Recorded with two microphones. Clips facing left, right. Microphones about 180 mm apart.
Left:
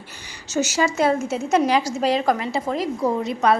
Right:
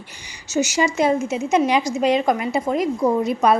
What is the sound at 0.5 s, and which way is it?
A woman's voice, 10° right (ahead or behind).